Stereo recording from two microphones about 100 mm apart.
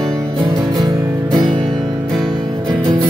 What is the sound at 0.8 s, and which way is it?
Music, 45° right (ahead or behind).